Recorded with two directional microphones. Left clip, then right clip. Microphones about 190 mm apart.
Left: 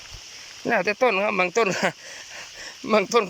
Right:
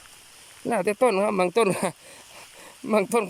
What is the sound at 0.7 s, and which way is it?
Speech, 20° right (ahead or behind).